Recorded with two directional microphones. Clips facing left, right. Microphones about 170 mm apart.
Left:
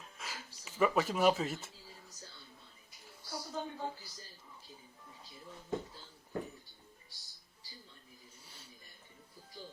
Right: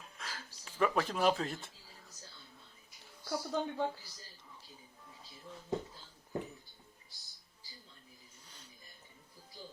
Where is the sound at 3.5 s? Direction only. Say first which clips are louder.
Right 5 dB; 75° right (ahead or behind).